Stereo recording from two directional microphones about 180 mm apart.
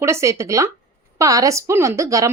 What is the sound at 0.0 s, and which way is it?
Speech, 15° right (ahead or behind).